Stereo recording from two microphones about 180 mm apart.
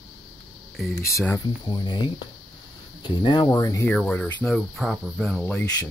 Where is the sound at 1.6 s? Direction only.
25° left (ahead or behind); by 4.3 s 10° left (ahead or behind).